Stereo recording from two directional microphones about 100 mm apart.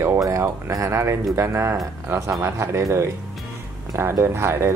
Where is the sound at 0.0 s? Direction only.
30° right (ahead or behind).